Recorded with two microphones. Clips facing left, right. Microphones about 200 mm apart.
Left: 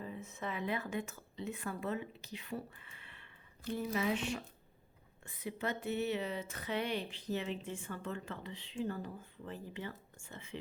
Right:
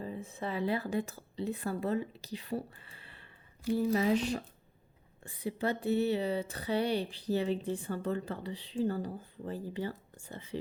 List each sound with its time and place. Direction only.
0.0 s speech: 35° right (ahead or behind)